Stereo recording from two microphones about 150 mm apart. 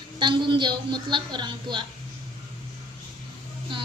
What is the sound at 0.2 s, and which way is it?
A man's voice, 30° right (ahead or behind).